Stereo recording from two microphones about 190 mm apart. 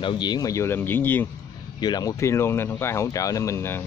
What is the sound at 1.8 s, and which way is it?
Speech, 20° left (ahead or behind).